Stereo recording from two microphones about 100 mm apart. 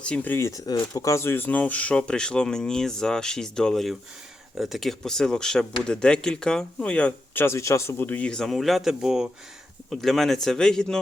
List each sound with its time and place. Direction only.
0.0 s speech: 15° left (ahead or behind)
0.4 s speech: 35° left (ahead or behind); by 7.4 s 10° left (ahead or behind)
7.4 s speech: 30° left (ahead or behind); by 11.0 s 5° left (ahead or behind)